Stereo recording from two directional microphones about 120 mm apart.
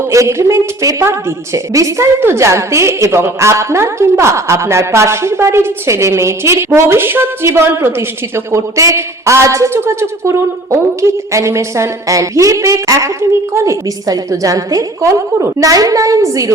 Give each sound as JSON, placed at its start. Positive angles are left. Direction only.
{"t": 0.1, "sound": "a woman's voice", "side_deg": -25}